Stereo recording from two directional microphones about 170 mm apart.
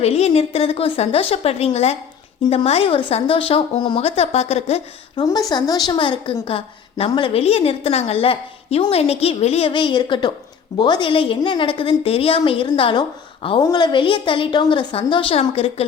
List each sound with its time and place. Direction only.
0.0 s a woman's voice: 35° left (ahead or behind)
5.1 s a woman's voice: 25° left (ahead or behind)